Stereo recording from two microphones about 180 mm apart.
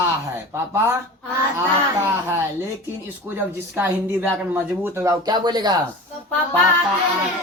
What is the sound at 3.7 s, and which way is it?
Speech, 10° right (ahead or behind).